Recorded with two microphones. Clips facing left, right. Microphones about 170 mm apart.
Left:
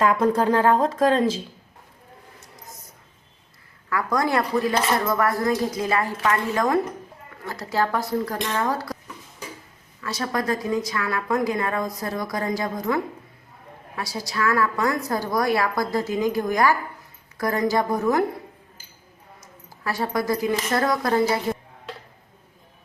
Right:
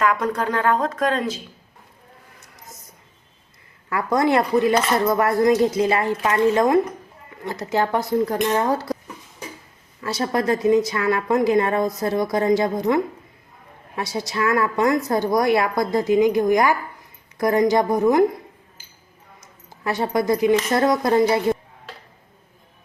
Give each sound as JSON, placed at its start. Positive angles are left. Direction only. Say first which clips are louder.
{"t": 0.0, "sound": "speech", "louder": "left 2 dB", "side_deg": 30}
{"t": 3.8, "sound": "speech", "louder": "right 4 dB", "side_deg": -25}
{"t": 10.0, "sound": "a woman's voice", "louder": "right 4 dB", "side_deg": -25}
{"t": 19.8, "sound": "speech", "louder": "right 4 dB", "side_deg": -20}